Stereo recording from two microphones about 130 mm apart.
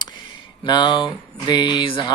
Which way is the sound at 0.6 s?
35° left (ahead or behind).